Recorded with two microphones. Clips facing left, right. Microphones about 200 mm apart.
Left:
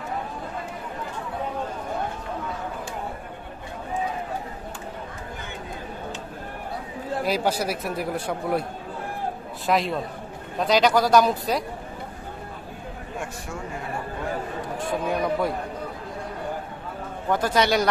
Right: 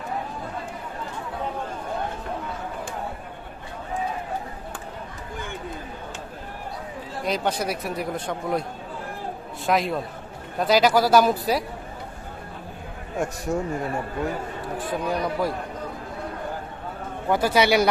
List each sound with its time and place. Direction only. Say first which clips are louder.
7.2 s speech: even; 5° left (ahead or behind)
9.7 s speech: even; centre (ahead or behind)
13.5 s a man's voice: right 12 dB; 40° right (ahead or behind)
14.9 s speech: left 2 dB; centre (ahead or behind)
17.3 s a man's voice: right 2 dB; 10° right (ahead or behind)